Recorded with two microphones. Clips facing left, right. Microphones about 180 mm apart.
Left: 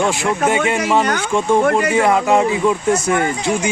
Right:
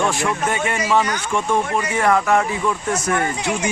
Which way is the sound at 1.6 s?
65° left (ahead or behind).